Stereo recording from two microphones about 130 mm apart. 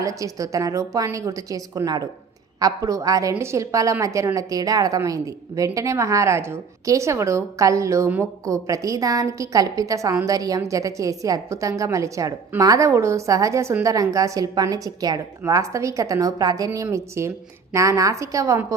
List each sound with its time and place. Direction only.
0.0 s a woman's voice: 25° right (ahead or behind)